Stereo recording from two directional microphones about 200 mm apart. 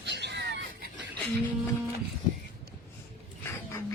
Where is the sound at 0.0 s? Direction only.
55° right (ahead or behind).